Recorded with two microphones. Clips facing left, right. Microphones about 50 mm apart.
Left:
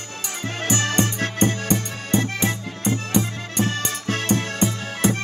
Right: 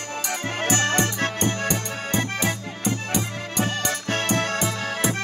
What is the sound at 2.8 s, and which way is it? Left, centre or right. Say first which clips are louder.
Accordion: left 4 dB; left.